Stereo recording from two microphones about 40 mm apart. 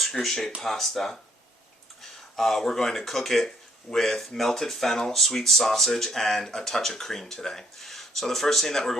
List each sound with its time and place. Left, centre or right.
0.0 s speech: centre
2.3 s speech: centre
7.8 s speech: centre